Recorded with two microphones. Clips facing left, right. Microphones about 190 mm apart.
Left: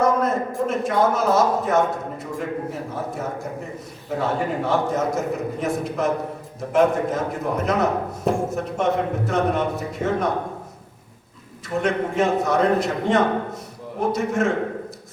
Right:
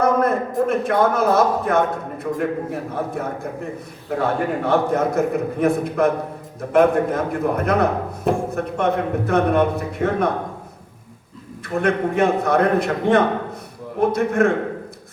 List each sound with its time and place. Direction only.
0.0 s a man's voice: 55° right (ahead or behind)
4.2 s a man's voice: 55° right (ahead or behind)
11.6 s a man's voice: 55° right (ahead or behind)